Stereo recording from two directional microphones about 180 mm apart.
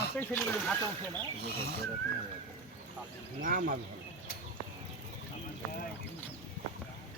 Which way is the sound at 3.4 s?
50° right (ahead or behind).